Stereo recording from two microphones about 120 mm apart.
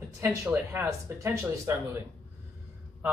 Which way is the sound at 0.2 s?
25° right (ahead or behind).